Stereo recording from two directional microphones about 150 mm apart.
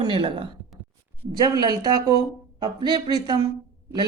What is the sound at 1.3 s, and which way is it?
Speech, 25° right (ahead or behind).